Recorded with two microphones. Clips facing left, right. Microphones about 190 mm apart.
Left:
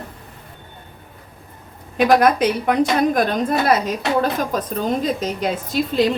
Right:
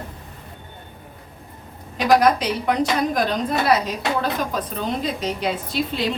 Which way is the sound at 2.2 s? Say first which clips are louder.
Left 2 dB; 50° left (ahead or behind).